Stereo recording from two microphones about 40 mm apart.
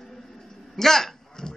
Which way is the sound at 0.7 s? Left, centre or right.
Centre.